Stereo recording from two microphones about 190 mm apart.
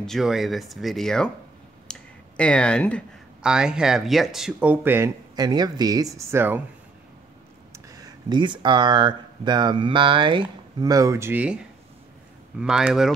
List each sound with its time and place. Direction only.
0.0 s speech: centre (ahead or behind)
1.9 s clicking: 5° left (ahead or behind)
3.4 s speech: 5° right (ahead or behind)
7.7 s speech: 20° right (ahead or behind); by 13.1 s 5° right (ahead or behind)